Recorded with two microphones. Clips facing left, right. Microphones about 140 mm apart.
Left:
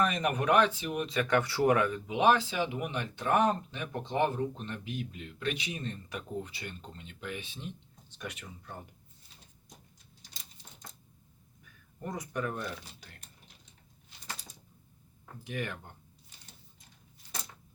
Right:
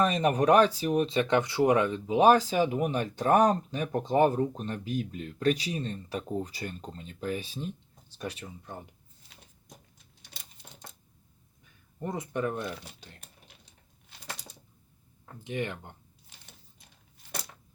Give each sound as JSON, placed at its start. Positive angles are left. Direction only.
{"t": 0.0, "sound": "speech", "side_deg": -30}
{"t": 2.0, "sound": "speech", "side_deg": -40}
{"t": 11.9, "sound": "speech", "side_deg": -25}
{"t": 15.4, "sound": "speech", "side_deg": -20}